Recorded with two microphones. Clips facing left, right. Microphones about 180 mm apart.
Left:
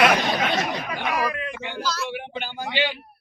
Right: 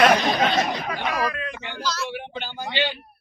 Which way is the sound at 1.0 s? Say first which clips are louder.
Left 1 dB; 15° left (ahead or behind).